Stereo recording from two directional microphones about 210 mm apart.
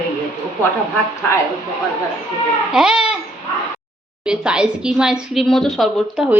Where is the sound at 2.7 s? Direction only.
5° right (ahead or behind).